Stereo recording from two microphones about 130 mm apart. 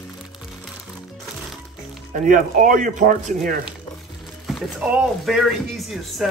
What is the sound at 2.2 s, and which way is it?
Speech, 90° right.